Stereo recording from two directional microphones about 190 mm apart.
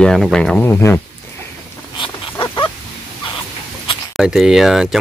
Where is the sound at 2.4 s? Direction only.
25° left (ahead or behind).